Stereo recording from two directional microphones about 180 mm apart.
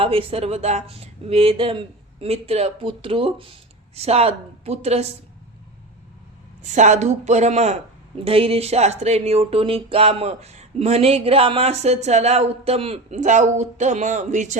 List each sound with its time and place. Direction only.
0.0 s speech: 30° right (ahead or behind)
6.6 s speech: 40° right (ahead or behind)